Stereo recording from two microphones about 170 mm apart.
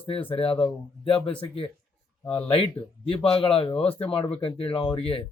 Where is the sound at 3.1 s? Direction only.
35° left (ahead or behind).